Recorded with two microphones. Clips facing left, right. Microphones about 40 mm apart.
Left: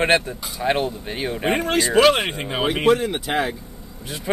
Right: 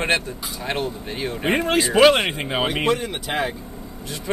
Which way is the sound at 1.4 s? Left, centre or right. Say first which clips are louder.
Right 1 dB; centre.